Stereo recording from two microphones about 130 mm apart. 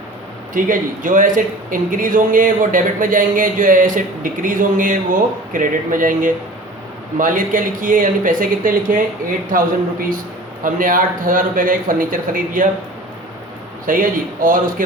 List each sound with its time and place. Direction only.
0.5 s a man's voice: 90° right
13.8 s a man's voice: 90° right